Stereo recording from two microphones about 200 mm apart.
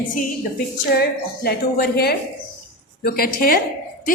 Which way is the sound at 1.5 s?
50° left (ahead or behind).